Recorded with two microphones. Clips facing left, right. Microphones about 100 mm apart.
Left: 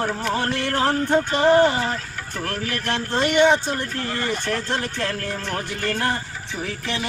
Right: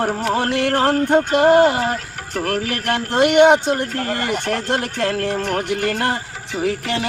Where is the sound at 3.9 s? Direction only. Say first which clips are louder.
Right 4 dB; 55° right (ahead or behind).